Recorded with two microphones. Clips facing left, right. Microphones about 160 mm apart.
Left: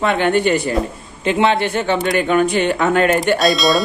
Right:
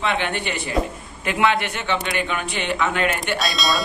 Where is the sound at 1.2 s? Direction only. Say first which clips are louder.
Left 5 dB; 30° left (ahead or behind).